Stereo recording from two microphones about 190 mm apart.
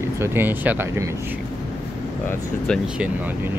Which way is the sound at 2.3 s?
5° left (ahead or behind).